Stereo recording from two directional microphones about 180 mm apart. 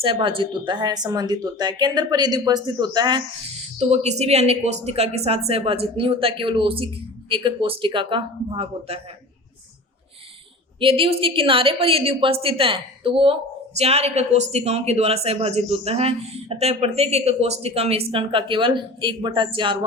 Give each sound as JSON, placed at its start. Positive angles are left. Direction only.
{"t": 0.0, "sound": "speech", "side_deg": -30}
{"t": 3.8, "sound": "speech", "side_deg": -40}
{"t": 10.8, "sound": "speech", "side_deg": -30}